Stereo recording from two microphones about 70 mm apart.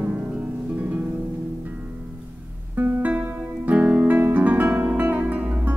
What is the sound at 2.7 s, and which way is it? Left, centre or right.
Guitar, right.